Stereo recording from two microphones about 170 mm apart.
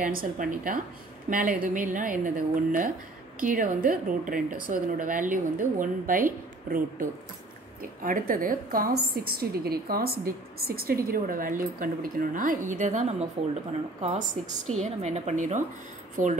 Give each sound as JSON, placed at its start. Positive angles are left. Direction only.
{"t": 0.0, "sound": "a woman's voice", "side_deg": -55}
{"t": 7.8, "sound": "a woman's voice", "side_deg": -55}